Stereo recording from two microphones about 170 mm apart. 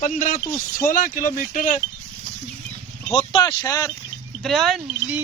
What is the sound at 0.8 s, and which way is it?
Speech, 55° left (ahead or behind).